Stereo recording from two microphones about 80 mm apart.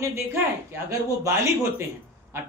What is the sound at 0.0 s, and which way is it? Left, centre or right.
A woman's voice, right.